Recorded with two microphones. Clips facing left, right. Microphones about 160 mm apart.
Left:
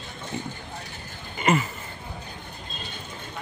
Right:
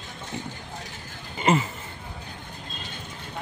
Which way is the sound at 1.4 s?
25° right (ahead or behind).